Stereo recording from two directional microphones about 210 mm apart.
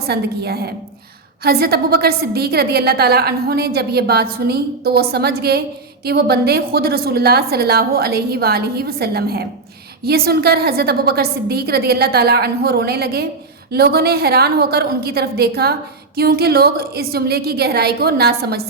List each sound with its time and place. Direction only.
0.0 s a woman's voice: 50° right (ahead or behind)